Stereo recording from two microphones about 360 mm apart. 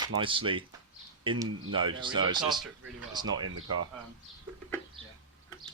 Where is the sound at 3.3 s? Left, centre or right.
Right.